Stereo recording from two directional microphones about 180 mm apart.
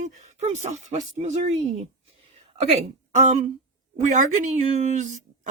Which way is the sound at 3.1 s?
40° right (ahead or behind).